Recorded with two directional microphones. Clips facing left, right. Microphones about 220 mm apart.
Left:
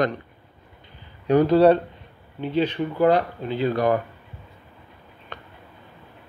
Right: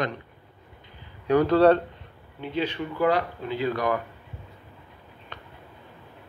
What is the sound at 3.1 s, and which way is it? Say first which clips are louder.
Speech: left 4 dB; 25° left (ahead or behind).